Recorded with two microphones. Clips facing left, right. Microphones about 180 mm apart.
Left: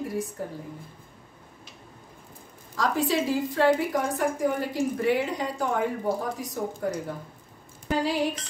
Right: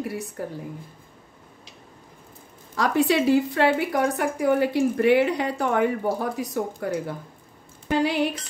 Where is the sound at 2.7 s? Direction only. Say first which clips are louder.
Right 4 dB; 70° right (ahead or behind).